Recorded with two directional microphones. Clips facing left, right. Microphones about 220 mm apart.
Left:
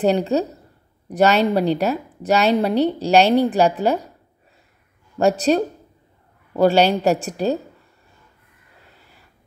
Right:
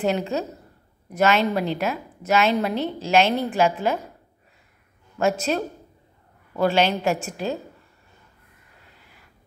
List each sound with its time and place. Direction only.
0.0 s a woman's voice: 35° left (ahead or behind)
5.2 s a woman's voice: 35° left (ahead or behind)